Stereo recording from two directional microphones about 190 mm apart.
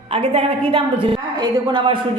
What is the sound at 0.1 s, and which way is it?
A woman's voice, 30° right (ahead or behind).